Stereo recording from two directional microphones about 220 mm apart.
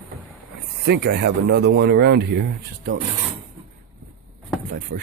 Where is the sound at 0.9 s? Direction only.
50° right (ahead or behind).